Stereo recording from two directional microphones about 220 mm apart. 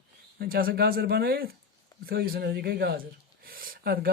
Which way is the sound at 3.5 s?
40° right (ahead or behind).